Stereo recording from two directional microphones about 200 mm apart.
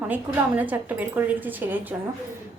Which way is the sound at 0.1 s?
10° right (ahead or behind).